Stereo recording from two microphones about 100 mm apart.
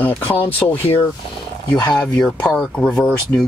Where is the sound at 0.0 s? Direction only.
15° left (ahead or behind).